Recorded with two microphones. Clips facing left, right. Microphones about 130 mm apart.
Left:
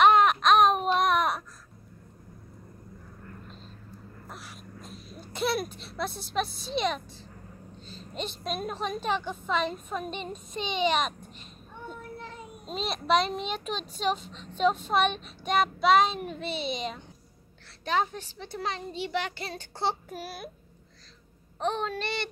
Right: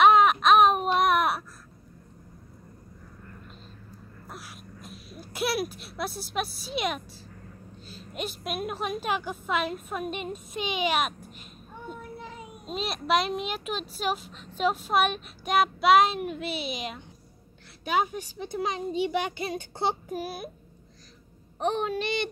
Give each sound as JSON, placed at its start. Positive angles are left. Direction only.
{"t": 0.0, "sound": "baby cry", "side_deg": -5}
{"t": 4.3, "sound": "a sound", "side_deg": -5}
{"t": 7.8, "sound": "a woman's voice", "side_deg": -5}
{"t": 14.6, "sound": "child singing", "side_deg": -5}
{"t": 17.8, "sound": "a woman's voice", "side_deg": -10}
{"t": 21.5, "sound": "a woman's voice", "side_deg": -15}